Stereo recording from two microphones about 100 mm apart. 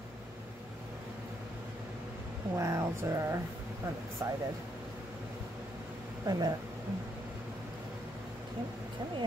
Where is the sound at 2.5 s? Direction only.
30° right (ahead or behind).